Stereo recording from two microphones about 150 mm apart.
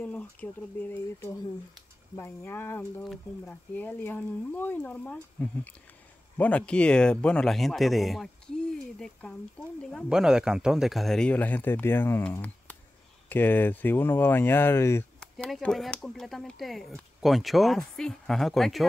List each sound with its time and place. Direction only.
0.0 s speech: 10° left (ahead or behind)
10.0 s speech: 5° right (ahead or behind); by 15.0 s 15° left (ahead or behind)
15.1 s speech: 5° left (ahead or behind)